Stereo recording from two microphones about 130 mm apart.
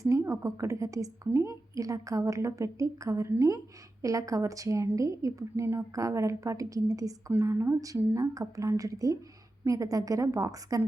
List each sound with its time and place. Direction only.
0.0 s a woman's voice: 25° right (ahead or behind)